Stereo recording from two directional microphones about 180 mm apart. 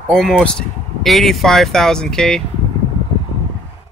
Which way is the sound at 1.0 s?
Centre (ahead or behind).